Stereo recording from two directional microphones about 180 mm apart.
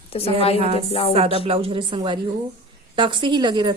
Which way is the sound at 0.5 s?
35° right (ahead or behind).